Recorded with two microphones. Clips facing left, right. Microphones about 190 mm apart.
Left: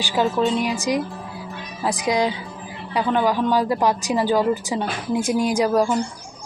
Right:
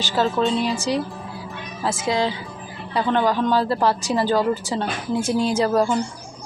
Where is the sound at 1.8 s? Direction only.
15° left (ahead or behind).